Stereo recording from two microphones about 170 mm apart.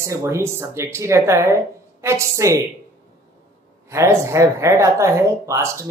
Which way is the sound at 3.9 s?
15° right (ahead or behind).